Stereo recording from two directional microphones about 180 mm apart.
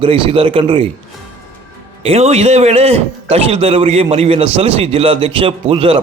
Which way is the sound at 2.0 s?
35° right (ahead or behind).